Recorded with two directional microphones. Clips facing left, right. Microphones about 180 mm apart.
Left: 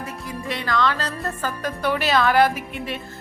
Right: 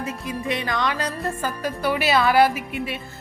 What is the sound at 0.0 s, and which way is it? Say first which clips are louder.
Speech: right 3 dB; 20° right (ahead or behind).